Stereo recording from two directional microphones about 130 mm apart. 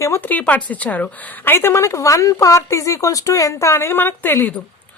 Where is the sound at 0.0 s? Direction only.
20° left (ahead or behind).